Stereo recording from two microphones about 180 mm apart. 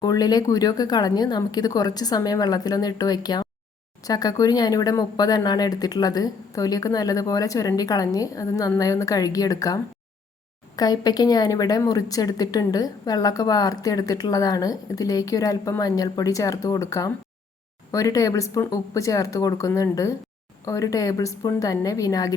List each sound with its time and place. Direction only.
0.0 s a woman's voice: 20° left (ahead or behind)